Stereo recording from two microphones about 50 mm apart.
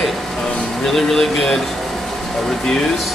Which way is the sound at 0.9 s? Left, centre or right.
Centre.